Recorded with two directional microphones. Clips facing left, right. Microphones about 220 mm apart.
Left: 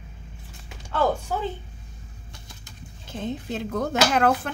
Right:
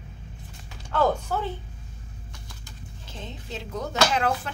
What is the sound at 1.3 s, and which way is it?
Speech, 15° left (ahead or behind).